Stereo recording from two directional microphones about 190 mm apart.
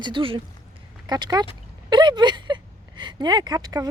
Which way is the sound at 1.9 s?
25° right (ahead or behind).